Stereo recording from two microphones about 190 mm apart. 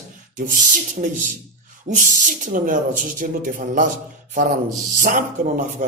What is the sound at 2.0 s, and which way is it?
A man's voice, 45° right (ahead or behind).